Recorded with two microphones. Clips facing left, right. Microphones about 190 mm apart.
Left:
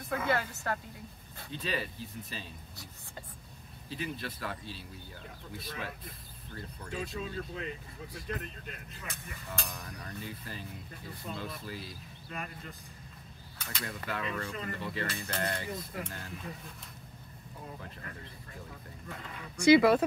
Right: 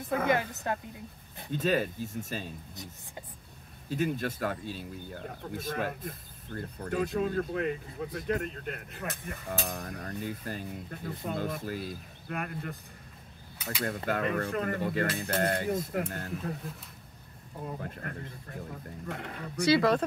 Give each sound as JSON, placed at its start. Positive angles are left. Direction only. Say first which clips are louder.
{"t": 0.3, "sound": "speech", "louder": "right 1 dB", "side_deg": -20}
{"t": 1.5, "sound": "speech", "louder": "right 8 dB", "side_deg": -45}
{"t": 2.7, "sound": "speech", "louder": "right 4 dB", "side_deg": -20}
{"t": 3.9, "sound": "speech", "louder": "right 8 dB", "side_deg": -45}
{"t": 13.8, "sound": "speech", "louder": "right 7 dB", "side_deg": -50}
{"t": 17.6, "sound": "speech", "louder": "right 8 dB", "side_deg": -55}
{"t": 18.7, "sound": "speech", "louder": "right 8 dB", "side_deg": -70}
{"t": 19.7, "sound": "speech", "louder": "left 3 dB", "side_deg": 10}